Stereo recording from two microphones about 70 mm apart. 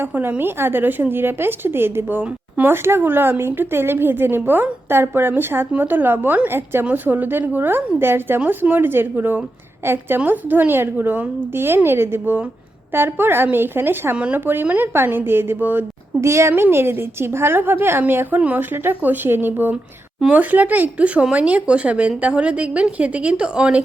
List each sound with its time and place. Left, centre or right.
0.0 s a woman's voice: right
16.2 s a woman's voice: right
19.7 s speech: centre
20.3 s a woman's voice: right